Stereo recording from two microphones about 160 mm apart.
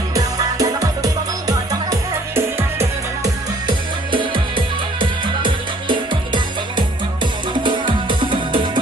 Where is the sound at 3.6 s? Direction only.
30° right (ahead or behind).